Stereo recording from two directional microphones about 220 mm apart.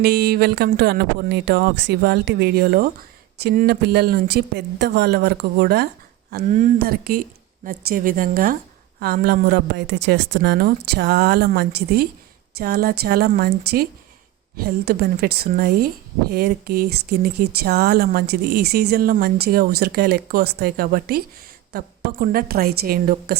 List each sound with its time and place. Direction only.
0.0 s a woman's voice: 45° right (ahead or behind)